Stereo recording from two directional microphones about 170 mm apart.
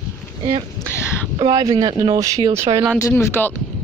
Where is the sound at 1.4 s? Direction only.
25° right (ahead or behind).